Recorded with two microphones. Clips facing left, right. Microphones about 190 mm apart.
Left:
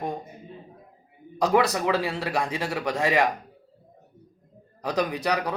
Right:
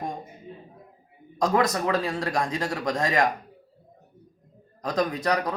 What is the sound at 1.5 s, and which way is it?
A man's voice, 10° left (ahead or behind).